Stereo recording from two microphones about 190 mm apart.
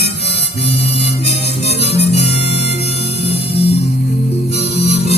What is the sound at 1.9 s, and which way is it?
Harmonica, 35° left (ahead or behind).